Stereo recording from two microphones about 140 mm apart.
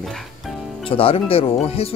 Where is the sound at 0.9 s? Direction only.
40° left (ahead or behind).